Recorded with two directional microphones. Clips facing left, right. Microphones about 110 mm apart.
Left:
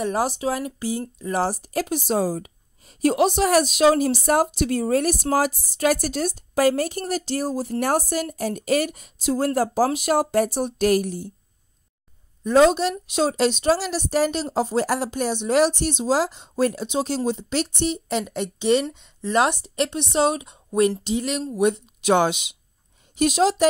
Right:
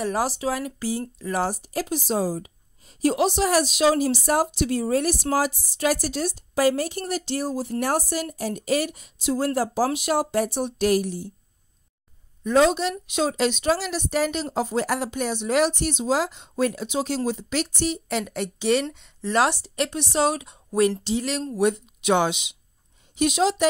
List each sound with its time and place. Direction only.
0.0 s speech: 25° left (ahead or behind)
1.4 s speech: 35° left (ahead or behind)
1.7 s a woman's voice: 60° left (ahead or behind)
12.4 s speech: 40° left (ahead or behind); by 21.8 s 20° left (ahead or behind)
22.0 s a woman's voice: 45° left (ahead or behind)